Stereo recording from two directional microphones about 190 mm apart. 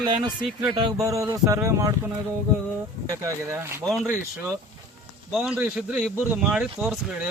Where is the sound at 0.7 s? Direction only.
25° right (ahead or behind).